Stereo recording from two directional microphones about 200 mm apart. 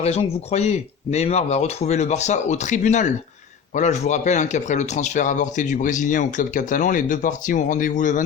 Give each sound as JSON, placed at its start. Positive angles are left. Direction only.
{"t": 0.0, "sound": "speech", "side_deg": 30}